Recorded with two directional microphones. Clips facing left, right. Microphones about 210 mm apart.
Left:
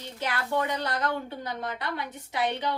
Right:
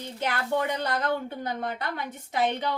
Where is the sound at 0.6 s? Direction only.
45° right (ahead or behind).